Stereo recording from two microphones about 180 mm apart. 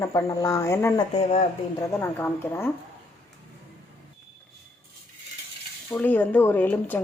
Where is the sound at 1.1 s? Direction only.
35° left (ahead or behind).